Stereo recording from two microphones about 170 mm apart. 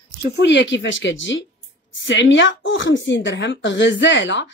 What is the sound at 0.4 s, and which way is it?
Speech, 90° left.